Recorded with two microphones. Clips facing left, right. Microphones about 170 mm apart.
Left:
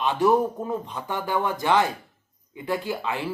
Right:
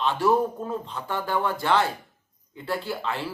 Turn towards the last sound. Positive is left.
turn(degrees=15)  # may be behind; listen again after turning